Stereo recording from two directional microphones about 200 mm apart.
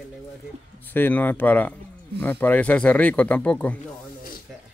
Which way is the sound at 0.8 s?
10° left (ahead or behind).